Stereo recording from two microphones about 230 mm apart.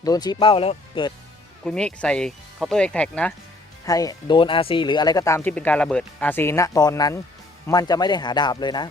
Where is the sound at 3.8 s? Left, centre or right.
Centre.